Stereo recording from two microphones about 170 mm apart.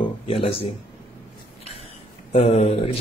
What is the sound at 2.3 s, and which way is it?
Speech, 35° left (ahead or behind).